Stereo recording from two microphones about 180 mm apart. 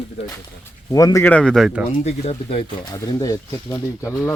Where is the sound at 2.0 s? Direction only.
35° left (ahead or behind).